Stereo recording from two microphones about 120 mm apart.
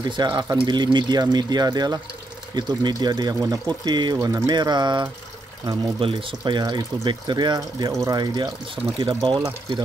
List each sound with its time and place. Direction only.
0.1 s speech: 40° right (ahead or behind)